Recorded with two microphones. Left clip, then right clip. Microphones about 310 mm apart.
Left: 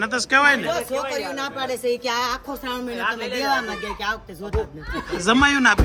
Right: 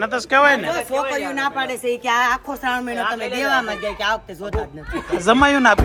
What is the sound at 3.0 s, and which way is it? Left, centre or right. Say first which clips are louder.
Speech: right 2 dB; right.